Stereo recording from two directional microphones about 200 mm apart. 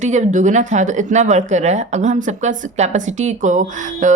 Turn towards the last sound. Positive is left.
turn(degrees=-40)  # may be behind; listen again after turning